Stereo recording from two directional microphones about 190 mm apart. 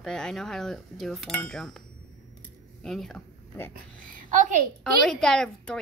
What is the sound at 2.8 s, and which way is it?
Speech, centre (ahead or behind).